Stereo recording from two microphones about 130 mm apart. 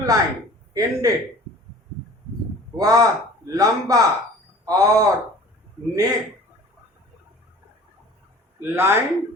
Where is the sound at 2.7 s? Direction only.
30° right (ahead or behind).